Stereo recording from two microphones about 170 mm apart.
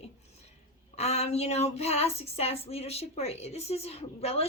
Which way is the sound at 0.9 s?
40° left (ahead or behind).